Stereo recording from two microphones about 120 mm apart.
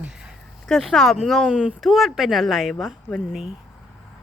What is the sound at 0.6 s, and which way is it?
Speech, centre (ahead or behind).